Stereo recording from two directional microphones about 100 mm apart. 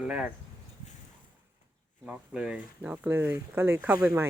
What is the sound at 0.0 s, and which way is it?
Speech, 10° right (ahead or behind).